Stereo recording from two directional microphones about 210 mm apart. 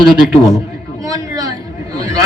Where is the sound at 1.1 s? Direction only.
15° right (ahead or behind).